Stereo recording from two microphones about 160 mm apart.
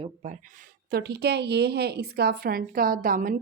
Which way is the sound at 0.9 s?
85° right.